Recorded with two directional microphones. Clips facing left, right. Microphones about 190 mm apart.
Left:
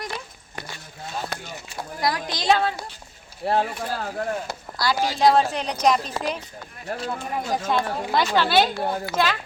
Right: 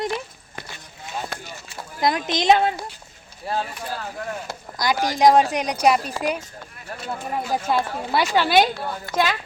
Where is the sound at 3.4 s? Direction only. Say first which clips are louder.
Left 4 dB; 65° left (ahead or behind).